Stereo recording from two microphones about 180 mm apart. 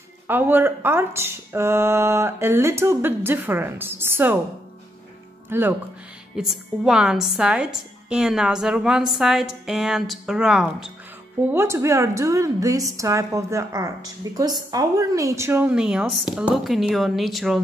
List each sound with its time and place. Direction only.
0.3 s a woman's voice: 10° right (ahead or behind)
5.5 s a woman's voice: 10° right (ahead or behind)
11.5 s a woman's voice: 15° right (ahead or behind)